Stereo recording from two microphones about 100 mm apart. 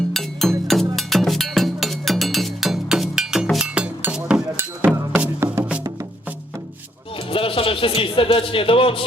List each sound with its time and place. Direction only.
0.1 s music: 5° left (ahead or behind)
0.9 s a sound: centre (ahead or behind)
3.5 s music: 5° right (ahead or behind)
4.1 s a sound: 10° right (ahead or behind)
4.8 s music: 20° right (ahead or behind)
7.3 s speech: 65° left (ahead or behind)